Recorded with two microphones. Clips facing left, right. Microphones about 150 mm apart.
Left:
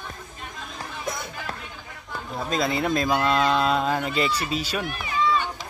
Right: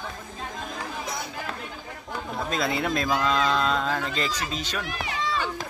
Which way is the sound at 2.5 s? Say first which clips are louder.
Left 3 dB; centre (ahead or behind).